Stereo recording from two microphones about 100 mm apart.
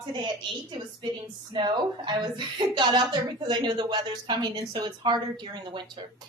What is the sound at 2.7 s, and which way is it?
A woman's voice, 50° right (ahead or behind).